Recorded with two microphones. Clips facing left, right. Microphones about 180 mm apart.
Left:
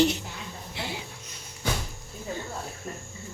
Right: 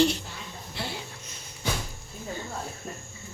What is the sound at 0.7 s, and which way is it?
Music, 15° left (ahead or behind).